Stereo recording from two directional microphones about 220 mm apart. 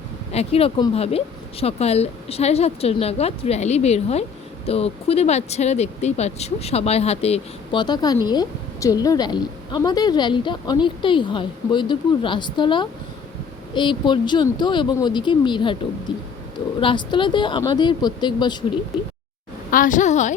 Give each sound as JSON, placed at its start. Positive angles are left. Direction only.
{"t": 0.3, "sound": "speech", "side_deg": 30}
{"t": 16.8, "sound": "speech", "side_deg": 20}
{"t": 19.7, "sound": "a woman's voice", "side_deg": 35}